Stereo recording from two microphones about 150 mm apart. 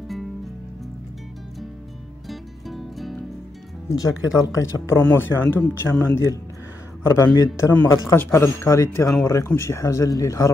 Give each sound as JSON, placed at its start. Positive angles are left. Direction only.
{"t": 2.2, "sound": "music", "side_deg": 0}
{"t": 3.9, "sound": "a man's voice", "side_deg": 20}